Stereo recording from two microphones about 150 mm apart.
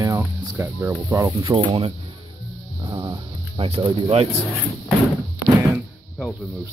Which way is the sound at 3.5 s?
40° right (ahead or behind).